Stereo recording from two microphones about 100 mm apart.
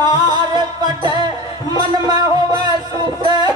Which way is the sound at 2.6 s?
45° right (ahead or behind).